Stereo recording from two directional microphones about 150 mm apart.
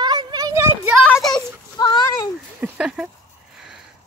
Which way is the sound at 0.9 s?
Centre (ahead or behind).